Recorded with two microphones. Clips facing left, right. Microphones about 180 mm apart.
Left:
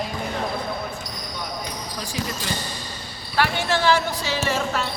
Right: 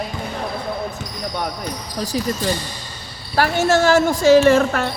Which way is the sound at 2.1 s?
40° right (ahead or behind).